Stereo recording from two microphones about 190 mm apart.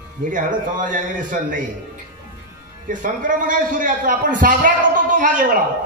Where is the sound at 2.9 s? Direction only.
45° right (ahead or behind).